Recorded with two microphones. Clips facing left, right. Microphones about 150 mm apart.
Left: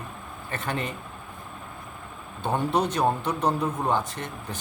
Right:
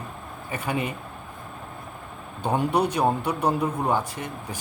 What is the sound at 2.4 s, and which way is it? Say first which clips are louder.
A man's voice: right 2 dB; 10° right (ahead or behind).